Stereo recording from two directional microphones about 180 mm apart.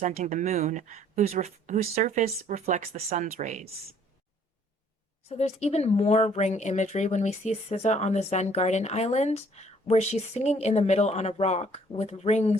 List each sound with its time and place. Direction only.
0.0 s speech: 45° right (ahead or behind)
5.3 s speech: 35° left (ahead or behind)